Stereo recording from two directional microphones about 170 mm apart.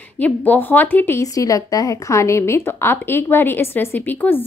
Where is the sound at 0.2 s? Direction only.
10° left (ahead or behind).